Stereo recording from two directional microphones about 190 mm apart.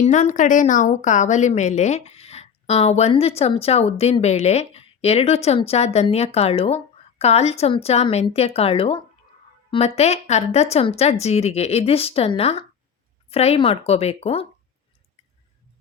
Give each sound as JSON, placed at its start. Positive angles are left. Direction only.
{"t": 0.0, "sound": "a woman's voice", "side_deg": 40}